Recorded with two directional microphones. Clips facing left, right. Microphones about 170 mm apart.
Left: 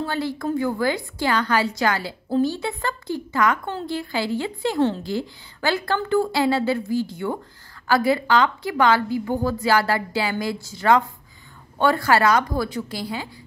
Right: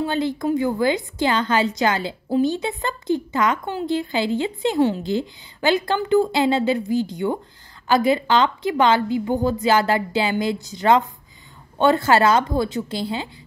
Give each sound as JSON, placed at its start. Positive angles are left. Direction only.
{"t": 0.0, "sound": "a woman's voice", "side_deg": -20}